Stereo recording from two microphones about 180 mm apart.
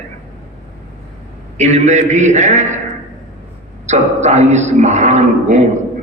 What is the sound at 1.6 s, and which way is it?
A man's voice, 40° right (ahead or behind).